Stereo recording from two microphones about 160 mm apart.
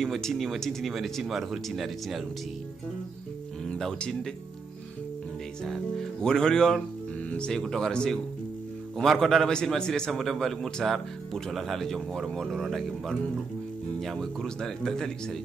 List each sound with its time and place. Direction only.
0.0 s a man's voice: centre (ahead or behind)
3.7 s a man's voice: 5° left (ahead or behind)
5.7 s a man's voice: 5° left (ahead or behind)
14.0 s a man's voice: centre (ahead or behind)